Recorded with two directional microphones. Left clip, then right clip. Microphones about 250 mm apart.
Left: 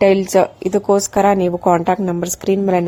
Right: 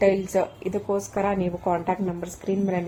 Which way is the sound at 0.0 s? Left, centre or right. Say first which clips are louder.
Left 9 dB; left.